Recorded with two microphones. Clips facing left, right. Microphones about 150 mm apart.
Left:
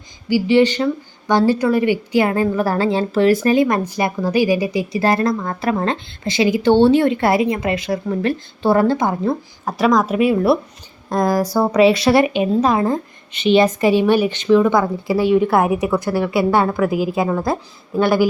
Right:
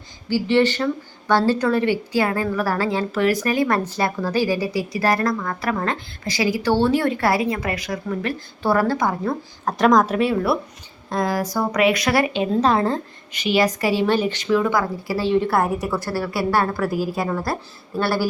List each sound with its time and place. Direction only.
0.3 s a woman's voice: 15° left (ahead or behind)
9.6 s speech: 5° left (ahead or behind)
11.1 s a woman's voice: 45° left (ahead or behind); by 13.0 s 10° left (ahead or behind)
13.3 s a woman's voice: 25° left (ahead or behind)